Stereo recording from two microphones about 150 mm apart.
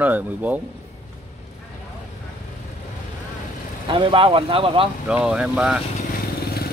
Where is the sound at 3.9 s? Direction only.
35° right (ahead or behind).